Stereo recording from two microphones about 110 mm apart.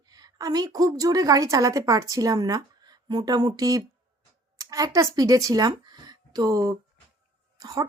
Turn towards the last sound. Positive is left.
turn(degrees=-35)  # may be behind; listen again after turning